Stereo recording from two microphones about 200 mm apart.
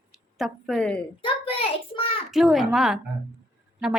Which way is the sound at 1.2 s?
30° left (ahead or behind).